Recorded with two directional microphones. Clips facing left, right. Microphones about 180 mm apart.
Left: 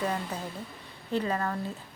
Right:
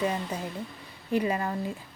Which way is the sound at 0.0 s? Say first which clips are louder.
Right 2 dB; 10° right (ahead or behind).